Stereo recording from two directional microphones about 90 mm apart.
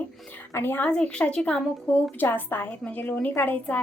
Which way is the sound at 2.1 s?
20° left (ahead or behind).